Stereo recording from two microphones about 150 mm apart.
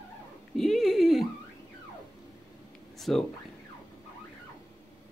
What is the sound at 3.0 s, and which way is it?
Speech, centre (ahead or behind).